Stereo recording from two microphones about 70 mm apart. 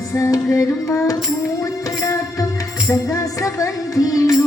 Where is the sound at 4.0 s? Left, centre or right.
Left.